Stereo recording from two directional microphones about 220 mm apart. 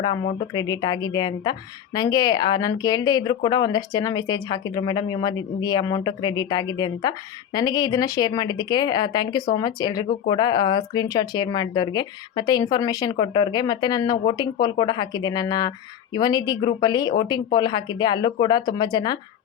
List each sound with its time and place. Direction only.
0.0 s speech: 20° left (ahead or behind)